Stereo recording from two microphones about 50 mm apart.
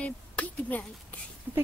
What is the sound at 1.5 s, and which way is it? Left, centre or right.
Speech, right.